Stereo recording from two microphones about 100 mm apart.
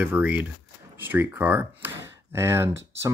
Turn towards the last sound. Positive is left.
turn(degrees=-25)  # may be behind; listen again after turning